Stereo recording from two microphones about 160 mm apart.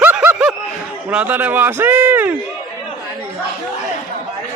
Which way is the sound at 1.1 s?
10° right (ahead or behind).